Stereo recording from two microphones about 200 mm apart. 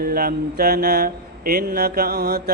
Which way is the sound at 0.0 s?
45° right (ahead or behind).